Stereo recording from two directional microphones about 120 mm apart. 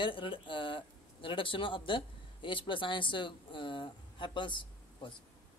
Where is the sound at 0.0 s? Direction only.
45° left (ahead or behind).